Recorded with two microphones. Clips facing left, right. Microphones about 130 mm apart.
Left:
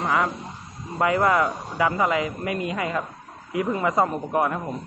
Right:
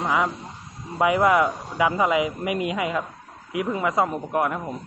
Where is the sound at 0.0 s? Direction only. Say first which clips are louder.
Even; 10° right (ahead or behind).